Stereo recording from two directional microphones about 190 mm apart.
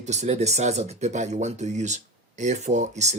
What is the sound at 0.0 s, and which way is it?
Speech, 35° right (ahead or behind).